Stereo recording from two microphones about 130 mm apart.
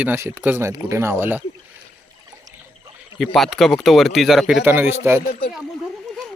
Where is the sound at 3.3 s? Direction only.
Centre (ahead or behind).